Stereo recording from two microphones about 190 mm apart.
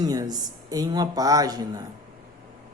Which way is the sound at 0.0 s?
20° right (ahead or behind).